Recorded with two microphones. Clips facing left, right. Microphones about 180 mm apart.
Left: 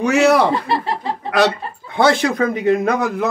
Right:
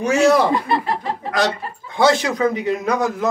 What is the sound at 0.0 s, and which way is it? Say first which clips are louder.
Speech: left 1 dB; 65° left (ahead or behind).